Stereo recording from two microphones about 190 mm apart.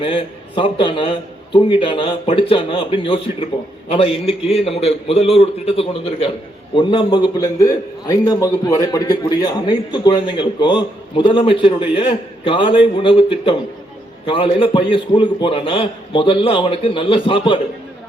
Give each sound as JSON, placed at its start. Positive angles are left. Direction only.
{"t": 0.0, "sound": "a man's voice", "side_deg": 25}